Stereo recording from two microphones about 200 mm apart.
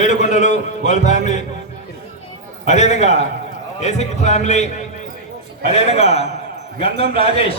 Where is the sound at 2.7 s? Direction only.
35° left (ahead or behind).